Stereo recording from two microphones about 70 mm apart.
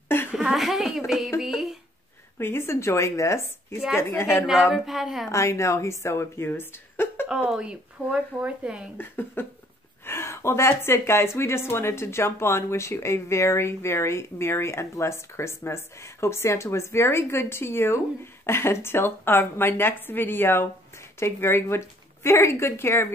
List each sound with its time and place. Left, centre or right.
0.3 s a woman's voice: centre
2.3 s speech: left
4.5 s a woman's voice: centre
5.3 s speech: left
7.2 s speech: centre
8.9 s speech: left